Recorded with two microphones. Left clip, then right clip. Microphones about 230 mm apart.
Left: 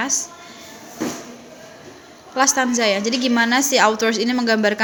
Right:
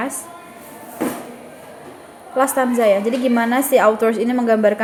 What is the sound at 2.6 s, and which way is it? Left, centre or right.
A woman's voice, centre.